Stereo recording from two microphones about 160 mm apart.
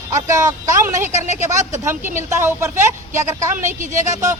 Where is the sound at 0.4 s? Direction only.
20° right (ahead or behind).